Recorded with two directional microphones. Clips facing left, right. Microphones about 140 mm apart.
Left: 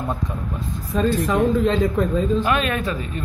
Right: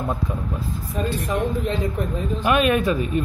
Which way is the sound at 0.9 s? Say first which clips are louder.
Left 6 dB; 90° left.